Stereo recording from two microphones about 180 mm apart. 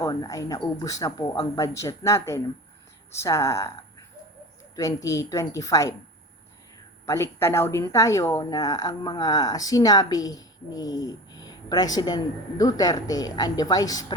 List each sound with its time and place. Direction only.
0.0 s a woman's voice: 20° left (ahead or behind)
7.0 s speech: 15° left (ahead or behind)